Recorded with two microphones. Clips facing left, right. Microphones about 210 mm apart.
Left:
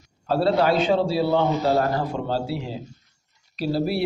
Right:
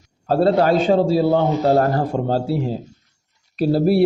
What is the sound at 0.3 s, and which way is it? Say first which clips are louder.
A man's voice: right 4 dB; 45° right (ahead or behind).